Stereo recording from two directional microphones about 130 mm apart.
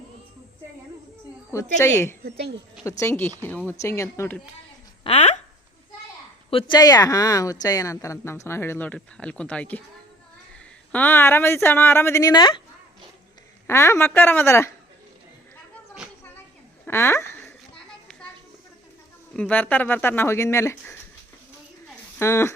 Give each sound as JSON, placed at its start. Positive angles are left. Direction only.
{"t": 1.5, "sound": "speech", "side_deg": 20}
{"t": 5.0, "sound": "speech", "side_deg": 50}
{"t": 6.5, "sound": "speech", "side_deg": 45}
{"t": 6.7, "sound": "speech", "side_deg": 30}
{"t": 10.9, "sound": "speech", "side_deg": 15}
{"t": 13.7, "sound": "speech", "side_deg": 20}
{"t": 16.8, "sound": "a sound", "side_deg": 15}
{"t": 19.3, "sound": "speech", "side_deg": 10}
{"t": 22.2, "sound": "speech", "side_deg": 20}